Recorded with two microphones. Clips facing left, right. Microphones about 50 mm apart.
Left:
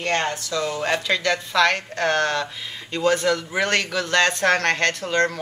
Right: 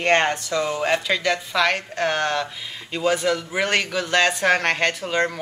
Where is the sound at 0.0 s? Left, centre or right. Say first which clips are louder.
Right 4 dB; right.